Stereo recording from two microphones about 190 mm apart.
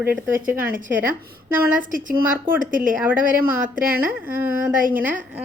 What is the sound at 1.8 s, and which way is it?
Speech, 45° right (ahead or behind).